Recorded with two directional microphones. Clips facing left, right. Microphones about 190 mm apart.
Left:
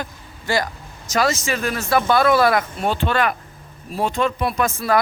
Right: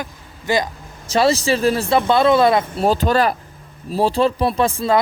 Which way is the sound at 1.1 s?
30° right (ahead or behind).